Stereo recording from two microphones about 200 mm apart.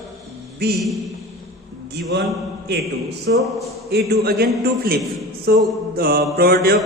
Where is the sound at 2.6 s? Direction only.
55° right (ahead or behind).